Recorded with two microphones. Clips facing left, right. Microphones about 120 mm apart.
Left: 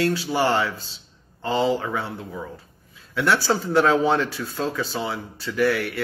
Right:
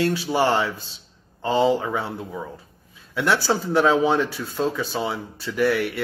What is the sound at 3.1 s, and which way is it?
Speech, 15° right (ahead or behind).